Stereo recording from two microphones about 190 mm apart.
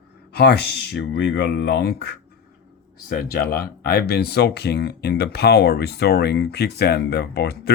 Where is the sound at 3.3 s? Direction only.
55° left (ahead or behind).